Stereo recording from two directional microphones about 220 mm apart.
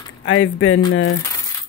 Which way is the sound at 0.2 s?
65° left (ahead or behind).